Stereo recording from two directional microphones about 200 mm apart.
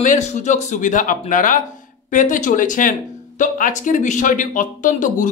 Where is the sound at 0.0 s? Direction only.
35° left (ahead or behind).